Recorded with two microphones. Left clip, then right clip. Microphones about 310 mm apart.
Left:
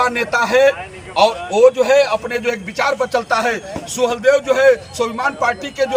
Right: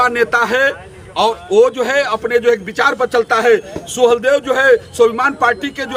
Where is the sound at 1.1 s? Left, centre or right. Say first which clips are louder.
Right 2 dB; centre.